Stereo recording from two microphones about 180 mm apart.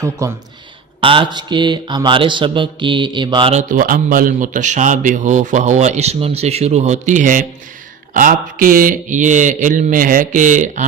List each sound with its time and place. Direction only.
0.0 s speech: 15° right (ahead or behind)
1.0 s mantra: 30° right (ahead or behind)
3.5 s speech: 45° right (ahead or behind)